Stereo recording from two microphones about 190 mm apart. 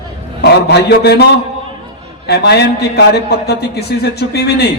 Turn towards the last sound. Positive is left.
turn(degrees=60)  # may be behind; listen again after turning